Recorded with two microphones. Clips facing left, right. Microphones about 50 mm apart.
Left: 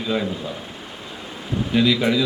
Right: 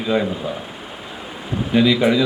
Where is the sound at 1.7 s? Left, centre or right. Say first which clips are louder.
Right 3 dB; centre.